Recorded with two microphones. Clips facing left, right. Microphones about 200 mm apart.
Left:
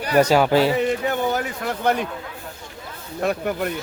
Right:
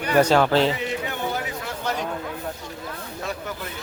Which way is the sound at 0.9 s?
50° left (ahead or behind).